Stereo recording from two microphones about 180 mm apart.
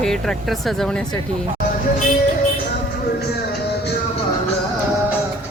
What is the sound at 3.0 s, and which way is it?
Music, 65° left (ahead or behind).